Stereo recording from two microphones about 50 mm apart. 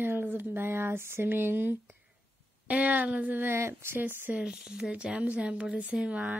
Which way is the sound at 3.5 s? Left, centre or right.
Right.